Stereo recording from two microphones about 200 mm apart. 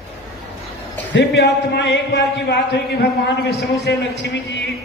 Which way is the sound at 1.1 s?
60° left (ahead or behind).